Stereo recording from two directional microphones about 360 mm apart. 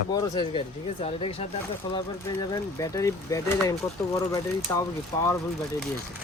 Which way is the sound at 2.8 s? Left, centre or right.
Centre.